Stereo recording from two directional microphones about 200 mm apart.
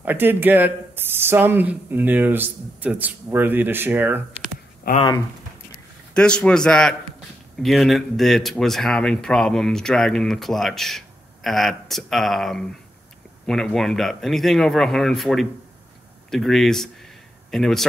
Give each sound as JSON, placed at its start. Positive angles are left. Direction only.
{"t": 0.0, "sound": "speech", "side_deg": -10}
{"t": 6.1, "sound": "a man's voice", "side_deg": 5}